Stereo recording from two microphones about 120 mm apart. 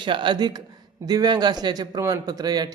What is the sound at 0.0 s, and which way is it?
A man's voice, 40° right (ahead or behind).